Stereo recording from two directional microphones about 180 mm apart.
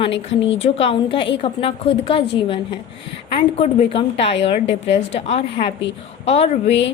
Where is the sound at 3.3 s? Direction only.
35° left (ahead or behind).